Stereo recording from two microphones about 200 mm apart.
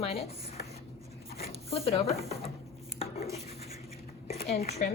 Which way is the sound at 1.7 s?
30° left (ahead or behind).